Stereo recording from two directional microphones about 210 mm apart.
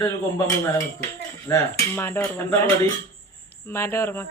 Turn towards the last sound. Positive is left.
turn(degrees=10)  # may be behind; listen again after turning